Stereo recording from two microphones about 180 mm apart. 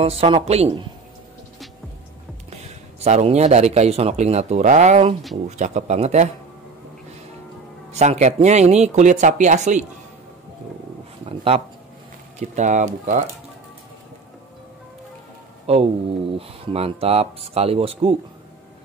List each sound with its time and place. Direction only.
0.0 s speech: 30° right (ahead or behind)
3.0 s speech: 35° right (ahead or behind)
7.9 s speech: 40° right (ahead or behind)
11.2 s speech: 35° right (ahead or behind)
15.6 s speech: 35° right (ahead or behind)